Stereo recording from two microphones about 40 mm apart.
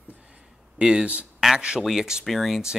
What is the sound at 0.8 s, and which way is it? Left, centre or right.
Speech, right.